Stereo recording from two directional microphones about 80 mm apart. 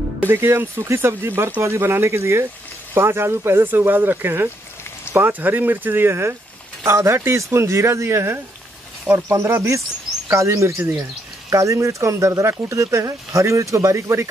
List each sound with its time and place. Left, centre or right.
0.3 s speech: right